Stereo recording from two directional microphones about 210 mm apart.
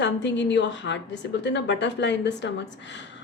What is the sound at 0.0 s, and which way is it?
A woman's voice, 60° left (ahead or behind).